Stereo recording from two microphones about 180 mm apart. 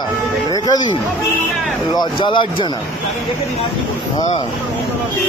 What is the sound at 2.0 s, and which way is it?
Speech, 25° left (ahead or behind).